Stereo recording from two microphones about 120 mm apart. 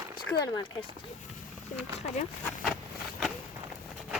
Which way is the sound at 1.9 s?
65° left (ahead or behind).